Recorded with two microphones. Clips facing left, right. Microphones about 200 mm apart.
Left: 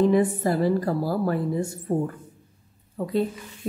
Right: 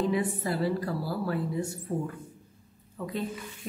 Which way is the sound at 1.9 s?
55° left (ahead or behind).